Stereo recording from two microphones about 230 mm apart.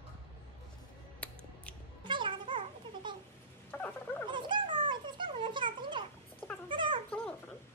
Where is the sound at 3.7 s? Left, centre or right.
Centre.